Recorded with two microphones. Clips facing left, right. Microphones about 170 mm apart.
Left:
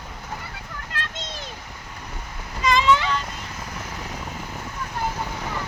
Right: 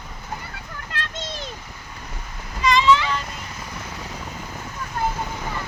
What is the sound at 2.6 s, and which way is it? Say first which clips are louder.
Vehicle: right 2 dB; 50° left (ahead or behind).